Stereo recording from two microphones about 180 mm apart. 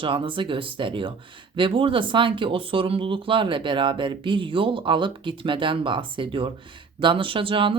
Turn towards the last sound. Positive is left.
turn(degrees=-30)  # may be behind; listen again after turning